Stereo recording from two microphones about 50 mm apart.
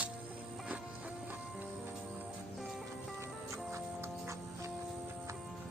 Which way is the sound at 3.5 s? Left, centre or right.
Right.